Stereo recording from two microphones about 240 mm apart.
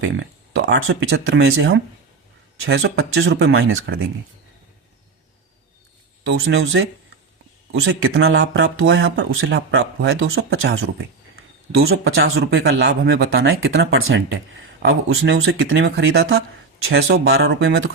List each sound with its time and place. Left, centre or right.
0.0 s speech: right
6.2 s speech: right